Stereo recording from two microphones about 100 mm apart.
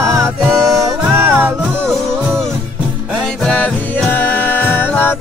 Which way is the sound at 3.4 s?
10° left (ahead or behind).